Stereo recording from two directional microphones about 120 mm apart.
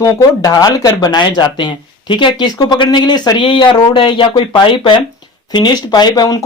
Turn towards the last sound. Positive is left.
turn(degrees=35)  # may be behind; listen again after turning